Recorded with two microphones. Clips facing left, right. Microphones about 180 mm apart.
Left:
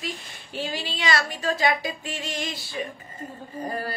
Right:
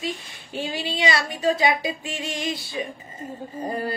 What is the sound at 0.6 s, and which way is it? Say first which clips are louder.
A woman's voice: right 4 dB; 20° right (ahead or behind).